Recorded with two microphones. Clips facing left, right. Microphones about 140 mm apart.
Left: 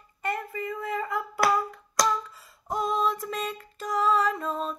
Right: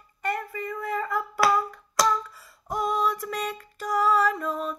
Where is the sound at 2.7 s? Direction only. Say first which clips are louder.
Right 1 dB; 25° left (ahead or behind).